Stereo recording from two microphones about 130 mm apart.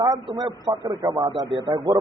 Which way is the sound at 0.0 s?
30° right (ahead or behind).